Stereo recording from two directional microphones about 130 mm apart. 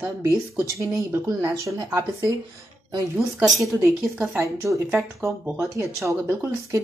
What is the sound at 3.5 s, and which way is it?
Speech, 20° right (ahead or behind).